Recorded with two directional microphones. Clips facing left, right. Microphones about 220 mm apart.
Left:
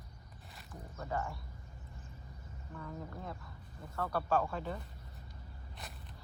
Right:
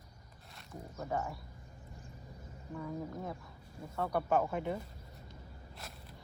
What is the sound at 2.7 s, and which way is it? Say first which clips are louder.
Speech: right 5 dB; 10° right (ahead or behind).